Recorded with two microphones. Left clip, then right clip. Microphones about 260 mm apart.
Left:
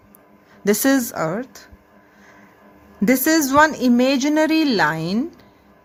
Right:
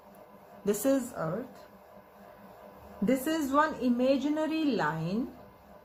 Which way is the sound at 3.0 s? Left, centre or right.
Left.